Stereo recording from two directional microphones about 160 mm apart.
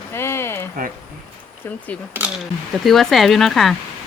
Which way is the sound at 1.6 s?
15° left (ahead or behind).